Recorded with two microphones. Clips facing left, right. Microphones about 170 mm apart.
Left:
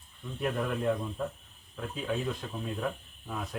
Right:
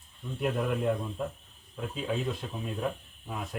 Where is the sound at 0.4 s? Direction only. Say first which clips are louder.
Right 1 dB; 5° right (ahead or behind).